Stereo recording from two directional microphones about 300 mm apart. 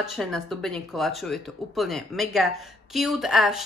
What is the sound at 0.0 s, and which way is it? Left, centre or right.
Speech, centre.